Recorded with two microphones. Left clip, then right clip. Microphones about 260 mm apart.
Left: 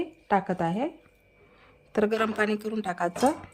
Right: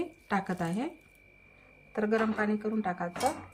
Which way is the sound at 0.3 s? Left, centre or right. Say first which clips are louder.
Left 8 dB; centre.